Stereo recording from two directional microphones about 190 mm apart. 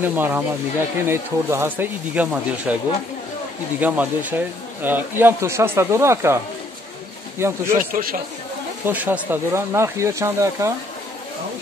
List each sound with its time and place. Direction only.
0.0 s speech: 10° right (ahead or behind)
3.8 s speech: 10° right (ahead or behind)
7.9 s speech: 50° right (ahead or behind)
8.8 s speech: 10° right (ahead or behind)